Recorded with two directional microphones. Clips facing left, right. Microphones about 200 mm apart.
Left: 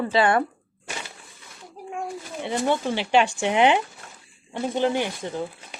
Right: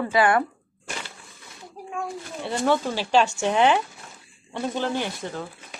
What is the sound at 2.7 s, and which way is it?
Speech, 20° left (ahead or behind).